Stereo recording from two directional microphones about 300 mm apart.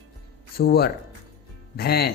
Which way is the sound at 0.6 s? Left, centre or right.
Left.